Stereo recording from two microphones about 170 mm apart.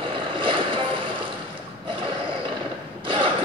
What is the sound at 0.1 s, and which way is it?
Boat, 30° right (ahead or behind).